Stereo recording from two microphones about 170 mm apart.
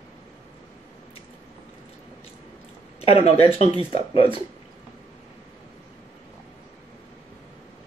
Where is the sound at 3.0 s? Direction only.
35° left (ahead or behind).